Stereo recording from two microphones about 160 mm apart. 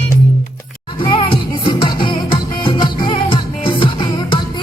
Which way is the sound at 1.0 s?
35° left (ahead or behind).